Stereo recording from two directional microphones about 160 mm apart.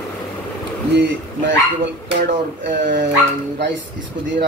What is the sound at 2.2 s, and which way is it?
Speech, 90° right.